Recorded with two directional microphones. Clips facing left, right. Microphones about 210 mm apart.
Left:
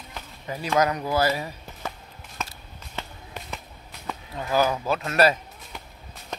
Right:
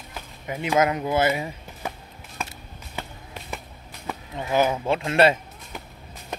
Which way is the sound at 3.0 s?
15° right (ahead or behind).